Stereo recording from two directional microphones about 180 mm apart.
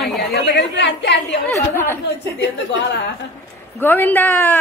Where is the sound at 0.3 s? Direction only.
75° left (ahead or behind).